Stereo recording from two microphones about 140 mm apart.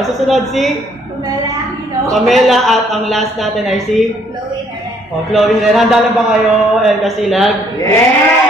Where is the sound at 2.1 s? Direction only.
Centre (ahead or behind).